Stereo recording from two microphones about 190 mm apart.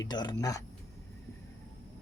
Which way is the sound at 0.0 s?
20° left (ahead or behind).